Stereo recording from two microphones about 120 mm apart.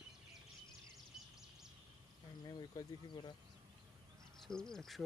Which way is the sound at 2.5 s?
35° left (ahead or behind).